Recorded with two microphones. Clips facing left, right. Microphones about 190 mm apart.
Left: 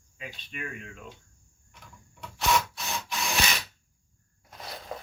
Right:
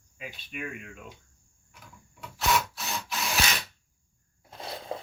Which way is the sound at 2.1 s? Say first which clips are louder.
Left 1 dB; 5° right (ahead or behind).